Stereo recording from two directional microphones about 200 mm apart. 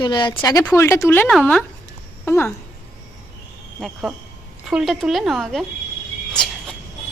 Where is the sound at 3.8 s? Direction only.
Centre (ahead or behind).